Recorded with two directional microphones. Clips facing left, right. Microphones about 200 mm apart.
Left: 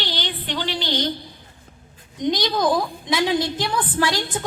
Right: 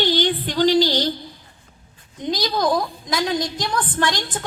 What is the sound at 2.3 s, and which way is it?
A woman's voice, centre (ahead or behind).